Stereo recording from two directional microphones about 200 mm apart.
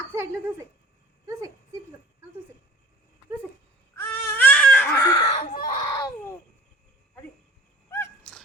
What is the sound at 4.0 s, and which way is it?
Baby cry, 10° left (ahead or behind).